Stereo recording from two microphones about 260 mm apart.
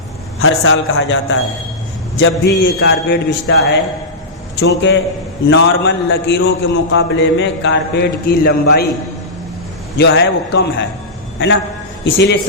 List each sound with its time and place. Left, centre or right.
0.3 s a man's voice: left
10.0 s a man's voice: left
12.0 s a man's voice: left